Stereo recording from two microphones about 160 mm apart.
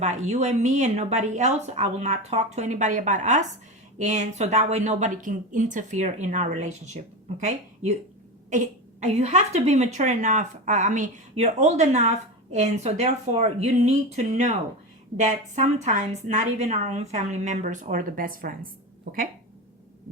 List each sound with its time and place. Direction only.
0.0 s speech: 45° right (ahead or behind)